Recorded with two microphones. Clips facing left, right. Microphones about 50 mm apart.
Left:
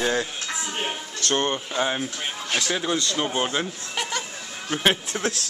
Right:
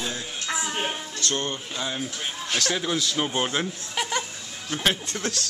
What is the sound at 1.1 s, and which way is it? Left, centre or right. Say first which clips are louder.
Speech: left 8 dB; left.